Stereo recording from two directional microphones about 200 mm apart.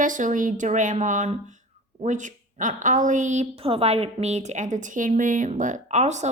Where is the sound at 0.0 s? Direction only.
40° right (ahead or behind).